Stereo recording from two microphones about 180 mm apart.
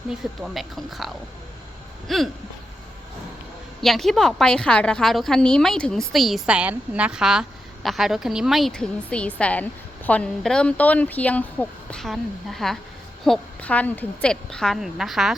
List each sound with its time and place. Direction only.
0.4 s a woman's voice: centre (ahead or behind)
3.8 s a woman's voice: centre (ahead or behind)